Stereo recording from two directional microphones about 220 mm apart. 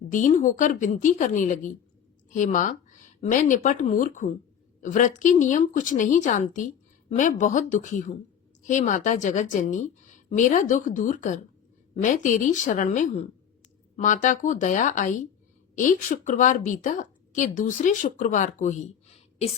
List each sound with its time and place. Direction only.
0.1 s a woman's voice: 35° left (ahead or behind)